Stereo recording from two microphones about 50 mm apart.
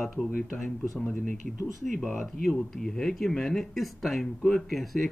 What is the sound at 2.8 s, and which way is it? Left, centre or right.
Speech, centre.